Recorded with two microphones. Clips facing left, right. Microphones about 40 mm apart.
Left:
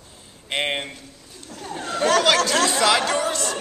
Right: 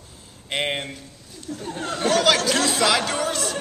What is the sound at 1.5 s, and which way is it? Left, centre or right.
Speech, centre.